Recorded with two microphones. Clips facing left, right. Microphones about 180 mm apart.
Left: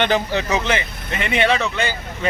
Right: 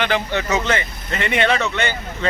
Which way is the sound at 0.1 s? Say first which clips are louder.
Left 1 dB; 15° left (ahead or behind).